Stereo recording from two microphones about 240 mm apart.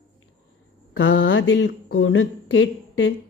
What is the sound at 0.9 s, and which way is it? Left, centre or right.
Speech, left.